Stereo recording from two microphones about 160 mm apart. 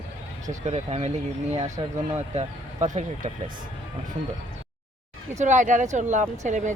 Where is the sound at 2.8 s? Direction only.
50° right (ahead or behind).